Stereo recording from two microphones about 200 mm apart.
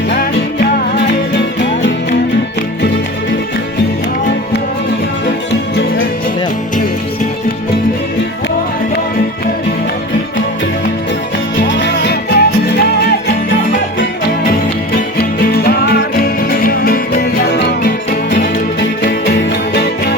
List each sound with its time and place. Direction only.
0.1 s music: 60° left (ahead or behind)
5.5 s music: 60° left (ahead or behind)
11.6 s music: 60° left (ahead or behind)
15.2 s music: 50° left (ahead or behind)